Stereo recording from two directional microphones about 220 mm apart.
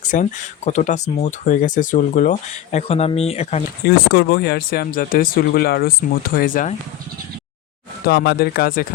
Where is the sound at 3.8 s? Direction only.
45° left (ahead or behind).